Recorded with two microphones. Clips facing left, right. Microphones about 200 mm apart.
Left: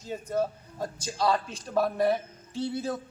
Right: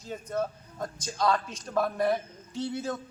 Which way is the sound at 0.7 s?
30° left (ahead or behind).